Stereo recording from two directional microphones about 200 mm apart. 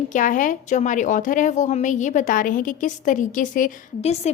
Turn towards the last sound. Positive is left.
turn(degrees=30)  # may be behind; listen again after turning